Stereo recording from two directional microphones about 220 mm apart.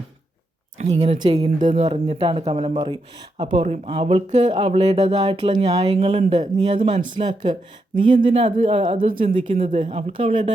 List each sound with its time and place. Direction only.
0.8 s speech: 30° right (ahead or behind)